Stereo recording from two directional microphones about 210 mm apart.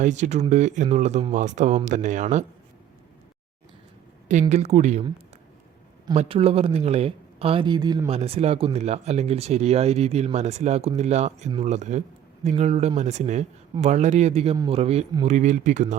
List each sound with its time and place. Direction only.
0.0 s speech: 35° right (ahead or behind)
4.3 s speech: 35° right (ahead or behind)
6.1 s speech: 25° right (ahead or behind)